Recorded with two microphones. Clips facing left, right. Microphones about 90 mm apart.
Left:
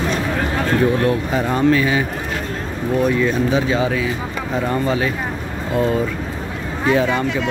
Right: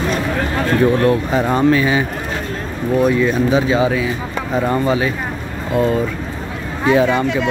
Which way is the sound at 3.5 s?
15° right (ahead or behind).